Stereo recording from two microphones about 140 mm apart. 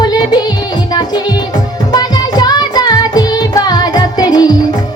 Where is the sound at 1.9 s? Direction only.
30° left (ahead or behind).